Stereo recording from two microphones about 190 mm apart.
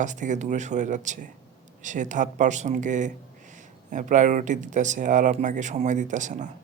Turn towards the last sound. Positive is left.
turn(degrees=-40)  # may be behind; listen again after turning